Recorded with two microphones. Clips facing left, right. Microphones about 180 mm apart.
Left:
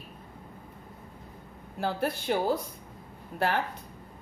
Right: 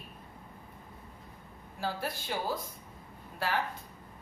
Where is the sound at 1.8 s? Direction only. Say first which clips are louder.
Left 6 dB; 60° left (ahead or behind).